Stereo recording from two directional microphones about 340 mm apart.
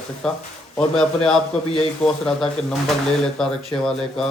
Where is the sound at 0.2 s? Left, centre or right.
Centre.